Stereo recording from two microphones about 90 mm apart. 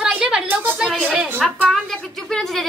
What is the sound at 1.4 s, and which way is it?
A woman's voice, centre (ahead or behind).